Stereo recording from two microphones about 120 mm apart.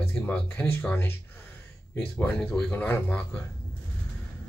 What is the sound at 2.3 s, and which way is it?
Speech, 10° left (ahead or behind).